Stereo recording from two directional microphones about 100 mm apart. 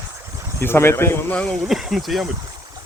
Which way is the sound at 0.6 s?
25° left (ahead or behind).